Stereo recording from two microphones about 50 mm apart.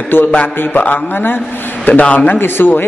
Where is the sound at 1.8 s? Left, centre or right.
Left.